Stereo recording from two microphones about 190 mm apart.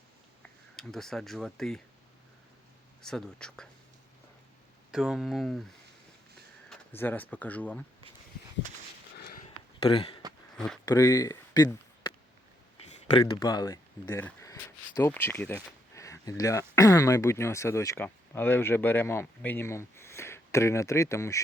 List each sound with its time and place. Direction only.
0.8 s speech: centre (ahead or behind)
3.0 s speech: 5° left (ahead or behind)
4.9 s speech: 5° right (ahead or behind)
6.7 s speech: 10° left (ahead or behind)
9.1 s sniff: 55° left (ahead or behind)
9.4 s a sound: 30° left (ahead or behind)
10.8 s speech: 20° left (ahead or behind)
12.8 s speech: 30° left (ahead or behind)
14.0 s speech: 10° left (ahead or behind)